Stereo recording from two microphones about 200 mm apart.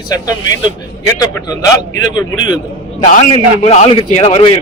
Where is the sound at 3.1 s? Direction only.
40° left (ahead or behind).